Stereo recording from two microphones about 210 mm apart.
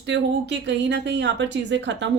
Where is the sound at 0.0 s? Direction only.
55° right (ahead or behind).